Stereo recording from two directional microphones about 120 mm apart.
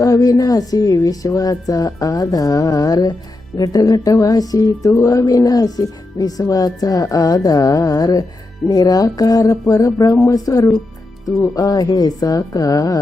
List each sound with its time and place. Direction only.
0.0 s speech: 30° left (ahead or behind)